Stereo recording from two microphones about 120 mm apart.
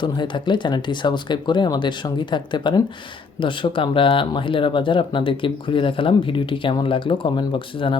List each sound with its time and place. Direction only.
0.0 s speech: 40° left (ahead or behind)